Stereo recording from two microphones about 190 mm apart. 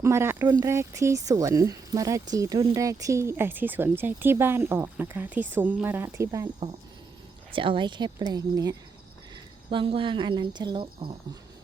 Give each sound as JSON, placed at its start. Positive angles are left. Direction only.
{"t": 0.0, "sound": "speech", "side_deg": -15}
{"t": 7.5, "sound": "speech", "side_deg": -25}